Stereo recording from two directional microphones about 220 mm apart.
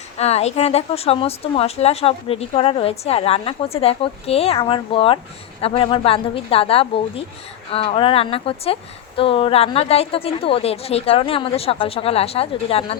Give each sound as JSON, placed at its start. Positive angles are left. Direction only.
{"t": 0.2, "sound": "a woman's voice", "side_deg": 30}